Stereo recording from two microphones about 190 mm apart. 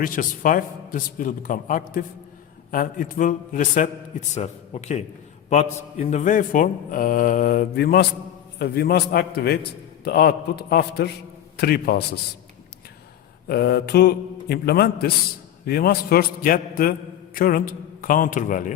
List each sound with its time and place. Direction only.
0.0 s a man's voice: 45° left (ahead or behind)
13.5 s a man's voice: 55° left (ahead or behind)